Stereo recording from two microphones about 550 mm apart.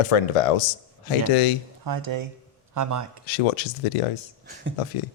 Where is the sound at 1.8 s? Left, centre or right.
Right.